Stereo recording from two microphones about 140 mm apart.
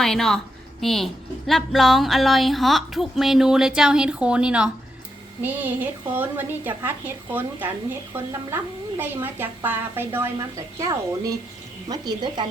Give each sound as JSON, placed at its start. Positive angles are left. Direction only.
{"t": 0.0, "sound": "a woman's voice", "side_deg": 5}